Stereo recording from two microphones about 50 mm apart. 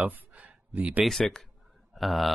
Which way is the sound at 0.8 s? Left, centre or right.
Right.